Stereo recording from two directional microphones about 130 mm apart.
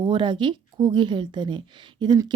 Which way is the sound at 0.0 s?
35° right (ahead or behind).